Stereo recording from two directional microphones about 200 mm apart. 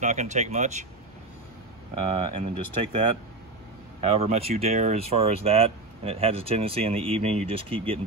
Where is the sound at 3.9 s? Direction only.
30° right (ahead or behind).